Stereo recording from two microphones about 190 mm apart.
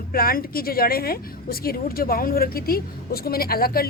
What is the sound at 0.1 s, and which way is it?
A woman's voice, 50° left (ahead or behind).